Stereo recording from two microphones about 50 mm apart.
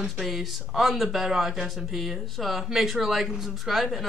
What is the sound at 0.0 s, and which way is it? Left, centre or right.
Speech, centre.